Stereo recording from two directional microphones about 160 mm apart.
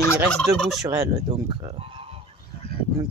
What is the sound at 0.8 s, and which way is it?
Speech, 20° right (ahead or behind).